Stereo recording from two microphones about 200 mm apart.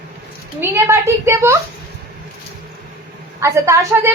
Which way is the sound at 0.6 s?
10° right (ahead or behind).